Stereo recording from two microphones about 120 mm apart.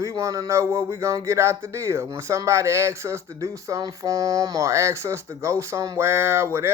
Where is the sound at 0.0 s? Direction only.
25° right (ahead or behind).